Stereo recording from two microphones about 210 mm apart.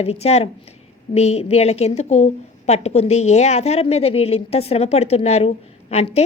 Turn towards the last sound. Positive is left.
turn(degrees=30)  # may be behind; listen again after turning